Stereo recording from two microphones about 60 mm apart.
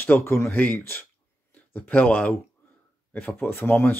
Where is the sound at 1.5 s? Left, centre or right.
Left.